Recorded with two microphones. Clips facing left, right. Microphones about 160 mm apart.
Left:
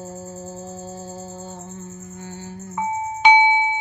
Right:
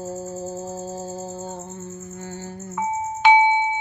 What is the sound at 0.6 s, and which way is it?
Speech, 40° right (ahead or behind).